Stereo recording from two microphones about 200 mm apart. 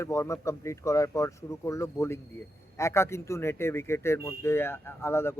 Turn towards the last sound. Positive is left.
turn(degrees=10)  # may be behind; listen again after turning